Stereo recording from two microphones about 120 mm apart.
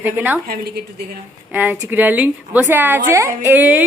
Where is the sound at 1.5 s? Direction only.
15° right (ahead or behind).